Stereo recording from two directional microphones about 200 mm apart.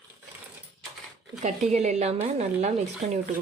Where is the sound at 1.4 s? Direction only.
35° right (ahead or behind).